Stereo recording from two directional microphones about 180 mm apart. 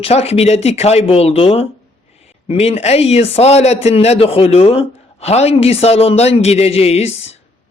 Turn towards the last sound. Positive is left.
turn(degrees=35)  # may be behind; listen again after turning